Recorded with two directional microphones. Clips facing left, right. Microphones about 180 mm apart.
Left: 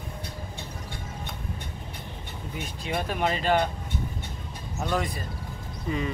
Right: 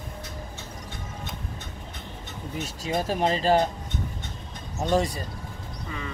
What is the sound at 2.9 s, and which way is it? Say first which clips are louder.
Speech: right 3 dB; 35° right (ahead or behind).